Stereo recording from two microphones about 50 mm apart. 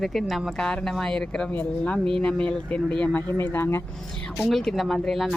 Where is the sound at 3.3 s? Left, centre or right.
Left.